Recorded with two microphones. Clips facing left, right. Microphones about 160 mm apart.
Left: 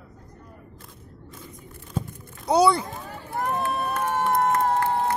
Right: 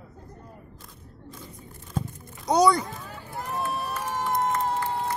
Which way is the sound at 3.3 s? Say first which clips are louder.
Left 4 dB; 55° left (ahead or behind).